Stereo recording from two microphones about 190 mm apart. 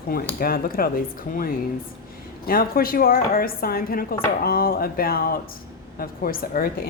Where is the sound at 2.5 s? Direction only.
50° left (ahead or behind).